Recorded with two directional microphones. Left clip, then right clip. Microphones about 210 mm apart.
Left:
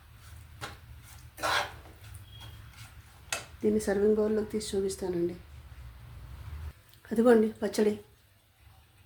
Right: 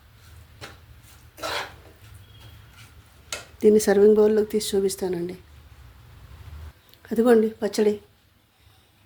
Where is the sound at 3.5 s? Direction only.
50° right (ahead or behind).